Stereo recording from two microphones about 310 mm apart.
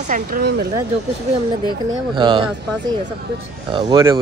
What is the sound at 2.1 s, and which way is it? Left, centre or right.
Speech, centre.